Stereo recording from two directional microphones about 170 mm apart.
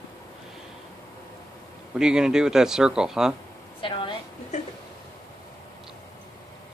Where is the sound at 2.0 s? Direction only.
5° right (ahead or behind).